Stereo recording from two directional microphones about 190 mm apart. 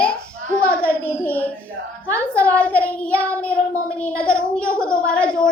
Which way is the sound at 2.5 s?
10° left (ahead or behind).